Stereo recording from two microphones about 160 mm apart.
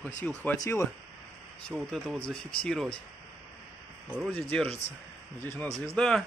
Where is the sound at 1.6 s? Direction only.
Centre (ahead or behind).